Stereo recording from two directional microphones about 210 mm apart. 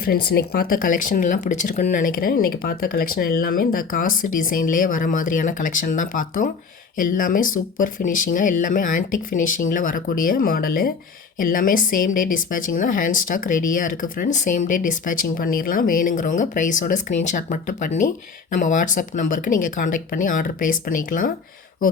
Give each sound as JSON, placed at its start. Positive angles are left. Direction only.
{"t": 0.3, "sound": "speech", "side_deg": 50}